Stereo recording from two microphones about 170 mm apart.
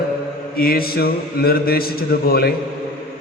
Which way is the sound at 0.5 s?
60° left (ahead or behind).